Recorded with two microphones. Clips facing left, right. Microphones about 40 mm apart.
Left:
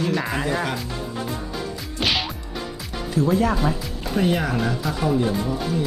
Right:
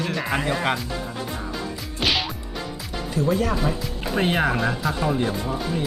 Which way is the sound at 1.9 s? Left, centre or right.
Centre.